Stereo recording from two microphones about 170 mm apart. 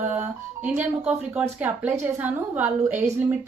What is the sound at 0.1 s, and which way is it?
Speech, 10° right (ahead or behind).